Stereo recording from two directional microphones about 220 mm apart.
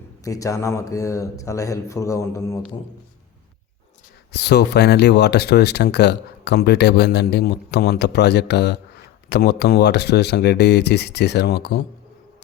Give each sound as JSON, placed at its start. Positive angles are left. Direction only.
{"t": 0.3, "sound": "speech", "side_deg": 15}
{"t": 4.3, "sound": "speech", "side_deg": 50}